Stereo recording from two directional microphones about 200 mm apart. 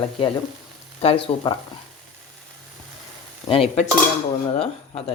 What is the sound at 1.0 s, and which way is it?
Speech, 30° left (ahead or behind).